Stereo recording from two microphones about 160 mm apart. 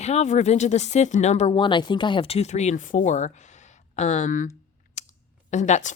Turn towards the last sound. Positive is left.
turn(degrees=45)  # may be behind; listen again after turning